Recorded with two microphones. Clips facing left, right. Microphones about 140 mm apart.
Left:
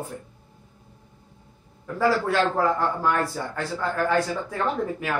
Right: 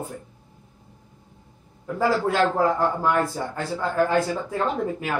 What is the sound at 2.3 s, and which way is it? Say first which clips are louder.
Speech: right 1 dB; 20° right (ahead or behind).